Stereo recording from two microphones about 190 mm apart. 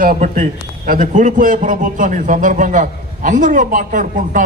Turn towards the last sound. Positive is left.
turn(degrees=-45)  # may be behind; listen again after turning